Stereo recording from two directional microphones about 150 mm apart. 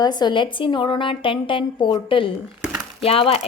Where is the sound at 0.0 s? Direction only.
30° left (ahead or behind).